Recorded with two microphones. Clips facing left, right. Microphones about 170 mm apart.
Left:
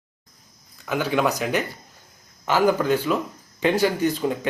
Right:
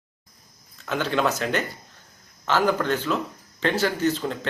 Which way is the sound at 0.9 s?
10° left (ahead or behind).